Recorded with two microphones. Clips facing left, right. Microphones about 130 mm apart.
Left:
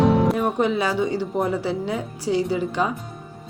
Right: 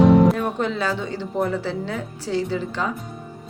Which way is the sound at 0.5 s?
15° left (ahead or behind).